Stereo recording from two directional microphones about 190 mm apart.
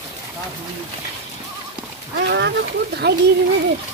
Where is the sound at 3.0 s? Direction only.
60° right (ahead or behind).